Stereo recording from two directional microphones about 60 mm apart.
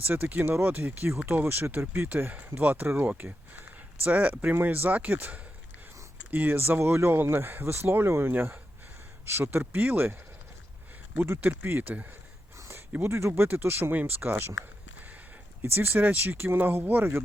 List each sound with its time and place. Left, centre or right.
0.0 s speech: right
6.3 s speech: right
11.3 s speech: right
12.5 s a sound: right
13.0 s speech: right
14.9 s a sound: right
15.6 s speech: right